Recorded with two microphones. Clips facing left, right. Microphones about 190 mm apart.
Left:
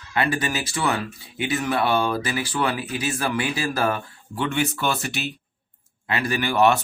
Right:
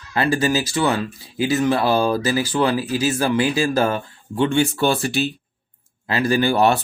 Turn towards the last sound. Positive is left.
turn(degrees=-35)  # may be behind; listen again after turning